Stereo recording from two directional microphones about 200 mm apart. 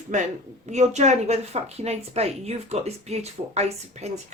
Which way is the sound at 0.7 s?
35° right (ahead or behind).